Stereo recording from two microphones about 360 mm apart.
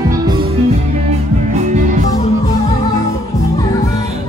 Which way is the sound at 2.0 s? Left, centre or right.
Centre.